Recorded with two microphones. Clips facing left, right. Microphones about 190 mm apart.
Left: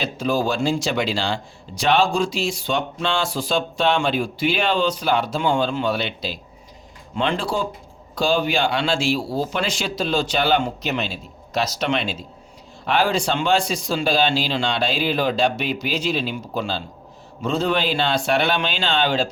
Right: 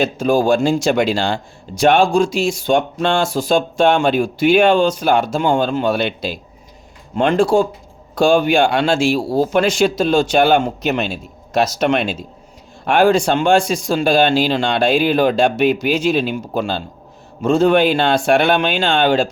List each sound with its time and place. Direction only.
0.0 s speech: 50° right (ahead or behind)